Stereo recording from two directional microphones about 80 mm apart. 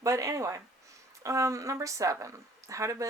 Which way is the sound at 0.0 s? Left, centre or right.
Right.